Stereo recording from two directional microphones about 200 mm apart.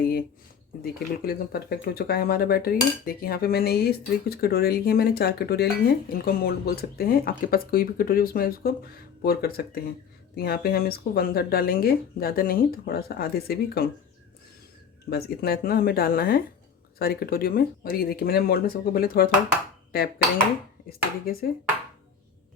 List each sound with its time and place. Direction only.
0.0 s a sound: 50° left (ahead or behind)
0.8 s speech: 50° left (ahead or behind)
15.1 s speech: 50° left (ahead or behind)